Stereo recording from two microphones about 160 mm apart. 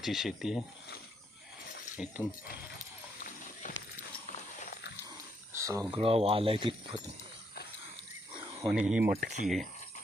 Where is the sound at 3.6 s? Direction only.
55° left (ahead or behind).